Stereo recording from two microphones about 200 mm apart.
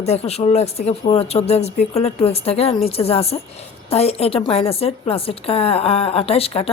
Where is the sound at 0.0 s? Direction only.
30° left (ahead or behind).